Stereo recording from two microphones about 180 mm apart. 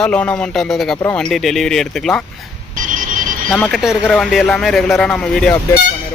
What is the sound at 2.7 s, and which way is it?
Alarm, 45° right (ahead or behind).